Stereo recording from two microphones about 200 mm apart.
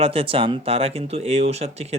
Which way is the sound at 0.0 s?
30° right (ahead or behind).